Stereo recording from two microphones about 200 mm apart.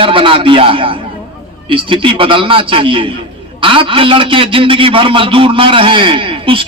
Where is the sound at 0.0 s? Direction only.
25° right (ahead or behind).